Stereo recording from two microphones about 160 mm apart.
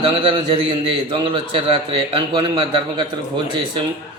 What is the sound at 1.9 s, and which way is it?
A man's voice, 30° right (ahead or behind).